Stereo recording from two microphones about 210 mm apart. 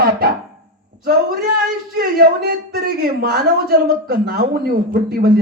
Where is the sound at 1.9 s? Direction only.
45° right (ahead or behind).